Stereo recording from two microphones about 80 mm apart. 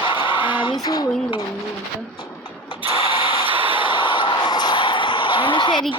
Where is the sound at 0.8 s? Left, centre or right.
Left.